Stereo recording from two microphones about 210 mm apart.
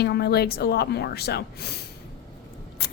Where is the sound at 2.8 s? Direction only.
45° left (ahead or behind).